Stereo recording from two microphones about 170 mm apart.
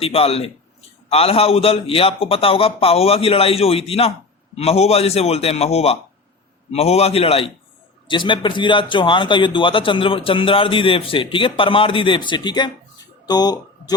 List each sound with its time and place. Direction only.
0.0 s a man's voice: 35° left (ahead or behind)